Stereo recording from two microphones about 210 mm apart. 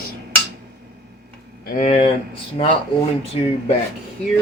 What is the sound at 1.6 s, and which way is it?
Speech, 35° left (ahead or behind).